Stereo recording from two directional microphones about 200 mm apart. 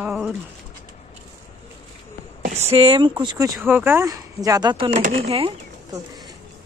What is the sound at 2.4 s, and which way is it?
Speech, 35° right (ahead or behind).